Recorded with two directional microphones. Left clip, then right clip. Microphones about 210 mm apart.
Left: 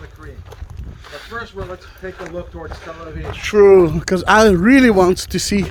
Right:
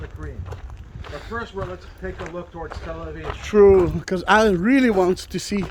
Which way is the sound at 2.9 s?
25° left (ahead or behind).